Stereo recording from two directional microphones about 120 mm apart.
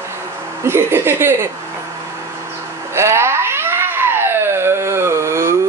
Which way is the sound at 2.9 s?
20° right (ahead or behind).